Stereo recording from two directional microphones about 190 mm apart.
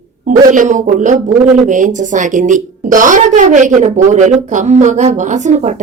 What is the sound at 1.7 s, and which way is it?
Speech, 40° right (ahead or behind).